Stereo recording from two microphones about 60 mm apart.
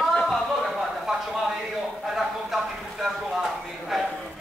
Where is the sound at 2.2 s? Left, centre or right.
Centre.